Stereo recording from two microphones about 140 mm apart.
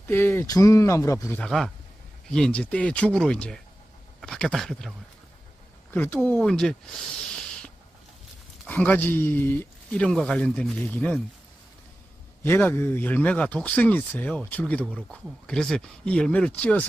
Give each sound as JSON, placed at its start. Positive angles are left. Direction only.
{"t": 0.1, "sound": "speech", "side_deg": 15}
{"t": 1.4, "sound": "speech", "side_deg": 0}
{"t": 5.9, "sound": "speech", "side_deg": 10}
{"t": 12.4, "sound": "speech", "side_deg": 20}